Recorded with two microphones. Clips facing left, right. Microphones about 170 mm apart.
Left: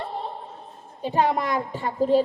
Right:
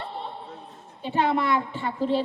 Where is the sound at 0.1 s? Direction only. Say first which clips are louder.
Left 3 dB; 40° left (ahead or behind).